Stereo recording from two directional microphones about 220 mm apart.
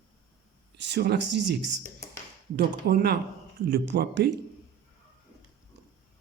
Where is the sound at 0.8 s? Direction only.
50° right (ahead or behind).